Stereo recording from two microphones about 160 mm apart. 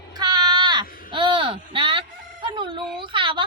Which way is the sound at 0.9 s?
60° left (ahead or behind).